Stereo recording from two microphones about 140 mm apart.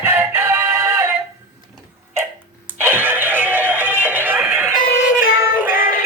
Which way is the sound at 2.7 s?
15° right (ahead or behind).